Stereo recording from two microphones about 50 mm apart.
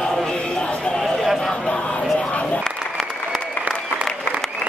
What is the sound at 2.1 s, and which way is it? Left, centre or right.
Crowd, left.